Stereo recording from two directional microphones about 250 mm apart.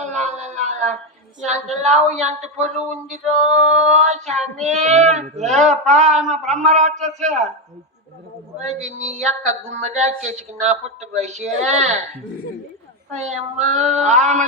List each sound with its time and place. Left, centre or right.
0.0 s a sound: right
1.5 s speech: right
3.2 s male singing: centre
3.9 s speech: right
4.3 s male singing: centre
4.7 s speech: right
8.6 s speech: right
13.1 s speech: right